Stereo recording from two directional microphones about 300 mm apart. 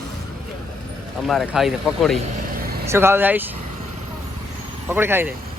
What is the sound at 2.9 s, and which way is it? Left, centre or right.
Speech, centre.